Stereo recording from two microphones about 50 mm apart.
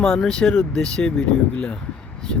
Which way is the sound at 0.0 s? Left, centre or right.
Centre.